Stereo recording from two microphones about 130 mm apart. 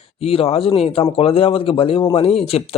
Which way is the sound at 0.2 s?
50° left (ahead or behind).